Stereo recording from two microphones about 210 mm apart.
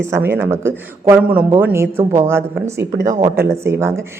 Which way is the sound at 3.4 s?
10° right (ahead or behind).